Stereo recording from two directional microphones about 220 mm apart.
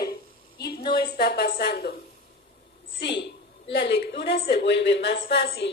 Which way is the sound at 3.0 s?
50° left (ahead or behind).